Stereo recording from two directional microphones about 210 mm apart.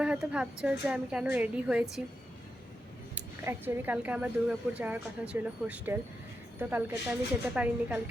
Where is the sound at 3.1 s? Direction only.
10° right (ahead or behind).